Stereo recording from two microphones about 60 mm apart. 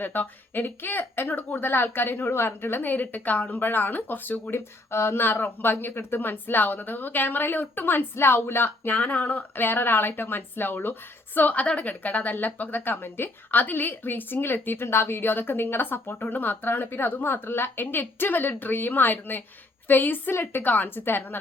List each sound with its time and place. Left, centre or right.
0.0 s speech: left
4.9 s speech: left
11.3 s speech: left